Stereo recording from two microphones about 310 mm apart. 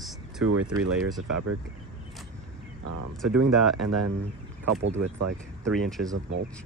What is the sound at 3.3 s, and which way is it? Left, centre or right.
Speech, right.